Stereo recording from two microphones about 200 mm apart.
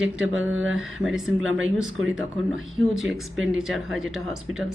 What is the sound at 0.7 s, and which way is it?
Speech, centre (ahead or behind).